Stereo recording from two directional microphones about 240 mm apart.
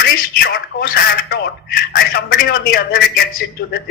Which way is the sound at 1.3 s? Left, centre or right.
Left.